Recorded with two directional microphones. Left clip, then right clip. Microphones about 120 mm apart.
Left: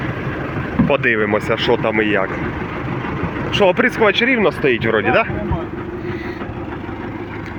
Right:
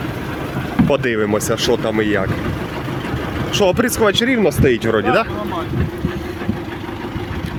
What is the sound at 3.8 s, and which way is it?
Speech, 90° right.